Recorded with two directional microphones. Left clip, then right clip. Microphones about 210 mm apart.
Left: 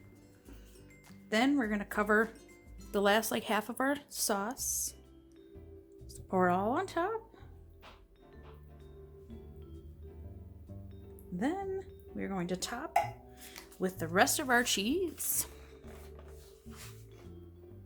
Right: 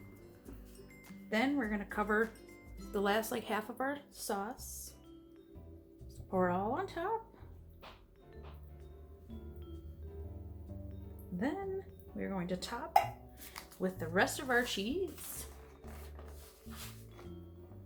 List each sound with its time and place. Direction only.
1.3 s speech: 45° left (ahead or behind)
2.9 s speech: 35° left (ahead or behind)
6.3 s speech: 50° left (ahead or behind)
11.3 s speech: 45° left (ahead or behind)